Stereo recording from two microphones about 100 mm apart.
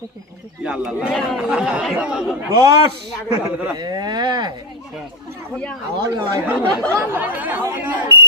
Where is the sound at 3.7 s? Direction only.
40° right (ahead or behind).